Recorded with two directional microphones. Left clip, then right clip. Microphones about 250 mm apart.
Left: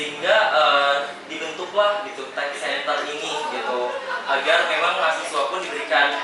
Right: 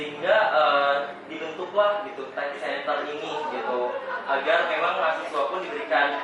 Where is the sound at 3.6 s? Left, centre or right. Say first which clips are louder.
Left 1 dB; right.